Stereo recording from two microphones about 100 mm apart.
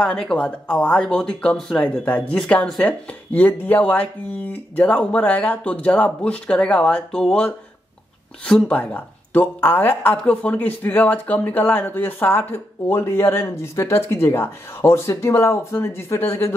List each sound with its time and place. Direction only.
0.0 s speech: 10° left (ahead or behind); by 16.5 s 25° left (ahead or behind)